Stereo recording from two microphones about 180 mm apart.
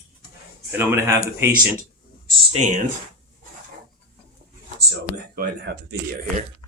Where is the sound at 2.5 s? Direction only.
40° right (ahead or behind).